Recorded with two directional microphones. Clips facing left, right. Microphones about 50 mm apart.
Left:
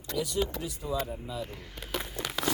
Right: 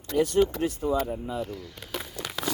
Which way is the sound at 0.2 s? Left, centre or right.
Right.